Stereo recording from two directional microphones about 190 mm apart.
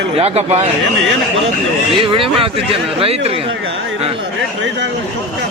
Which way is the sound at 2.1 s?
30° right (ahead or behind).